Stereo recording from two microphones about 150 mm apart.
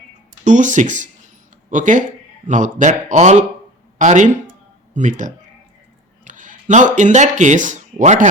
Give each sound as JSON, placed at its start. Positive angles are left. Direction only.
{"t": 0.4, "sound": "a man's voice", "side_deg": -55}